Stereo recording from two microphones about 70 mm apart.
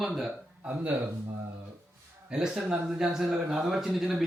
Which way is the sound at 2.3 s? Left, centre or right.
Centre.